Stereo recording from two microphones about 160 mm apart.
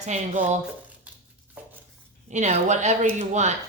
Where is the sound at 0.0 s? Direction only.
45° right (ahead or behind).